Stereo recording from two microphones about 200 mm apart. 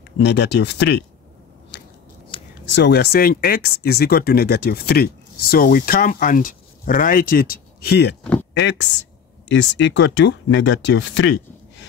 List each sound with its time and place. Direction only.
0.2 s speech: 55° left (ahead or behind)
1.7 s biting: 55° left (ahead or behind)
2.7 s speech: 60° left (ahead or behind)
8.2 s speech: 5° left (ahead or behind)
8.5 s speech: 65° left (ahead or behind)